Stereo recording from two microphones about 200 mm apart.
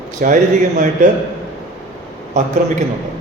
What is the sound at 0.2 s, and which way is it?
Speech, 45° right (ahead or behind).